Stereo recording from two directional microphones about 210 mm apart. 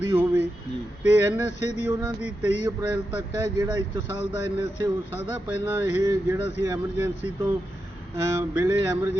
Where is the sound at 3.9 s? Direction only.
60° left (ahead or behind).